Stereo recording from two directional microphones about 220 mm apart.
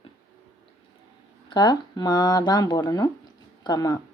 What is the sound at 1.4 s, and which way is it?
Speech, 20° left (ahead or behind).